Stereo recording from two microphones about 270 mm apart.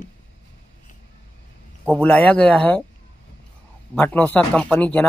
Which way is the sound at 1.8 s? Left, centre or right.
Centre.